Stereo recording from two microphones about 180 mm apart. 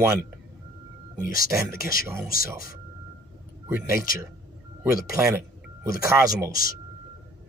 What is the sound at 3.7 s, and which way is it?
Speech, 15° right (ahead or behind).